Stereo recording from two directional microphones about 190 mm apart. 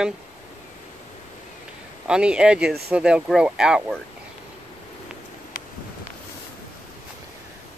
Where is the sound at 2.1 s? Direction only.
5° right (ahead or behind).